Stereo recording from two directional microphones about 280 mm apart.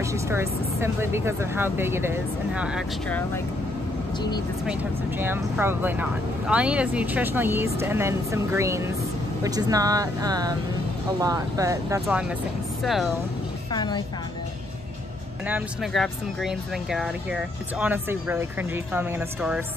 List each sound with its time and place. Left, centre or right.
0.0 s speech: centre
5.2 s speech: centre
13.7 s speech: centre
15.4 s speech: centre